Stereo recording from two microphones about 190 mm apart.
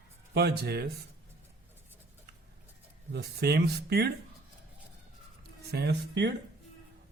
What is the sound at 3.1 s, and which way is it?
Speech, 55° right (ahead or behind).